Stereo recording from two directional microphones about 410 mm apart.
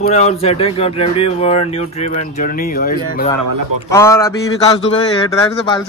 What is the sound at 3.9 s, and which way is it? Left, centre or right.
A man's voice, centre.